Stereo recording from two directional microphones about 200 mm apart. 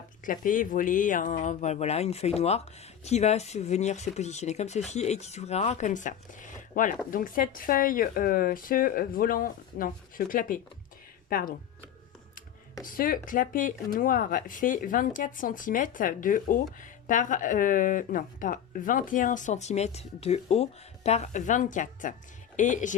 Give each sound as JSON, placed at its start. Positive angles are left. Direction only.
{"t": 0.3, "sound": "speech", "side_deg": 40}
{"t": 12.8, "sound": "speech", "side_deg": 45}